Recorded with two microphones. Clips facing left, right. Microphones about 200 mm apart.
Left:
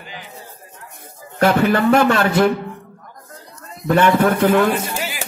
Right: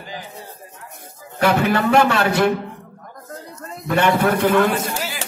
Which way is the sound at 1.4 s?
45° left (ahead or behind).